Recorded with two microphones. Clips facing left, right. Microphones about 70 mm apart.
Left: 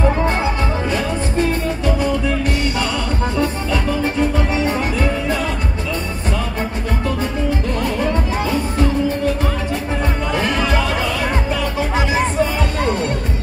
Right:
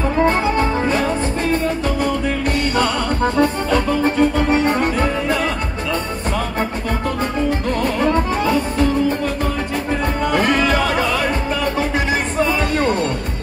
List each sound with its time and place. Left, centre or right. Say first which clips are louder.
0.3 s music: right 3 dB; right
2.2 s music: even; right
7.8 s music: right 4 dB; right
10.3 s music: right 3 dB; right